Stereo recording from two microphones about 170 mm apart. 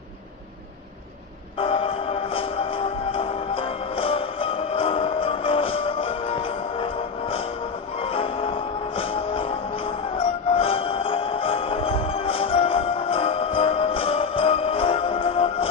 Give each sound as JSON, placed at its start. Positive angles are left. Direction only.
{"t": 1.6, "sound": "music", "side_deg": 35}